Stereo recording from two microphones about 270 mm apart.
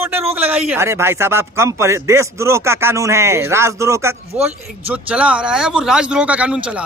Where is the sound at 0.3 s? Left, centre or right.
Centre.